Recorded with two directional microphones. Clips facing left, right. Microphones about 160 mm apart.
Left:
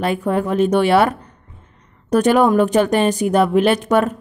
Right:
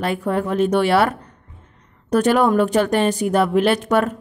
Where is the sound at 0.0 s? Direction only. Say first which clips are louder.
Left 2 dB; 15° left (ahead or behind).